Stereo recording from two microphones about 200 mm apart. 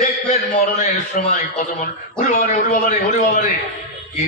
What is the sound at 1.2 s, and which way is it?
Mantra, 40° left (ahead or behind).